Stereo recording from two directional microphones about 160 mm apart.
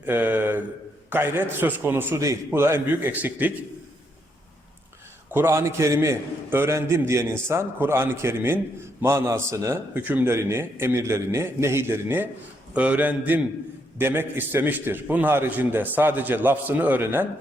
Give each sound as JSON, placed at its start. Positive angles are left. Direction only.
{"t": 0.0, "sound": "a man's voice", "side_deg": -10}
{"t": 5.3, "sound": "a man's voice", "side_deg": -15}